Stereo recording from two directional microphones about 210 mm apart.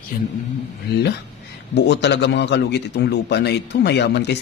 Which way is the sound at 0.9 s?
50° left (ahead or behind).